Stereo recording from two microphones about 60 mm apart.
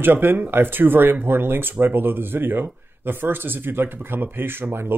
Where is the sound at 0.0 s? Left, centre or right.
Right.